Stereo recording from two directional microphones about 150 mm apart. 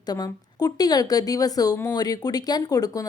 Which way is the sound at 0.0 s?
25° left (ahead or behind).